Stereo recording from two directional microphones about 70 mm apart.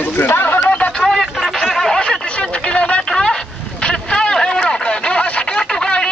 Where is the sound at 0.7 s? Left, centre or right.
Centre.